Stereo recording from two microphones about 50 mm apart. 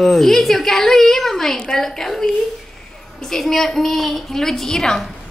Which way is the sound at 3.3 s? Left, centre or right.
Centre.